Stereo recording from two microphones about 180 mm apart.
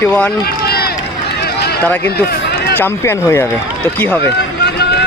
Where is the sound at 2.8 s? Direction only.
15° left (ahead or behind).